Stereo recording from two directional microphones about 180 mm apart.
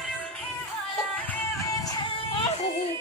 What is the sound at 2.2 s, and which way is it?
Yodeling, 40° left (ahead or behind).